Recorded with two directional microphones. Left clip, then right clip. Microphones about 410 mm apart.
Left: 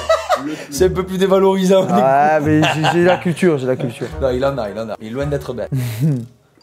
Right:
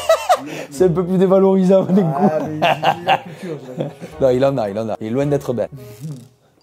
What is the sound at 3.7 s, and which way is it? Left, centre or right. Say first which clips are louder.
Speech: left 7 dB; left.